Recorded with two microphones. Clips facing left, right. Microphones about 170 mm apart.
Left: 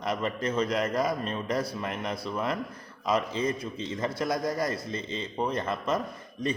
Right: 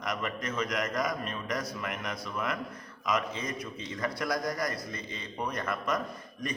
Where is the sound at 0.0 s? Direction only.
30° left (ahead or behind).